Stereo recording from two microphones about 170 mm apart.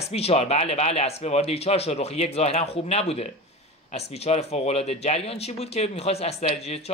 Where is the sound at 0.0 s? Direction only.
35° left (ahead or behind).